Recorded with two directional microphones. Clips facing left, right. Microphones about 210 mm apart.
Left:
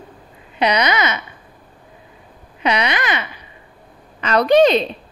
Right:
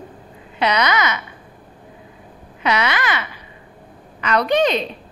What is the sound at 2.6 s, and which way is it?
Speech, 20° left (ahead or behind).